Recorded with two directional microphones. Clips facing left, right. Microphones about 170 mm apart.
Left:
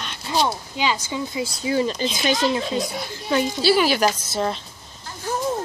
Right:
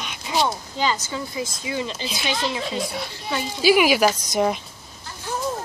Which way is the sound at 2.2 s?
45° left (ahead or behind).